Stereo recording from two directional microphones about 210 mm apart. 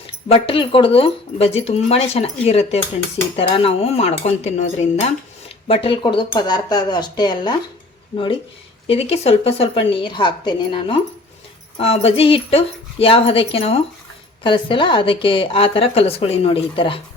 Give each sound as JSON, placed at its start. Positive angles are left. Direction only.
{"t": 0.3, "sound": "speech", "side_deg": 25}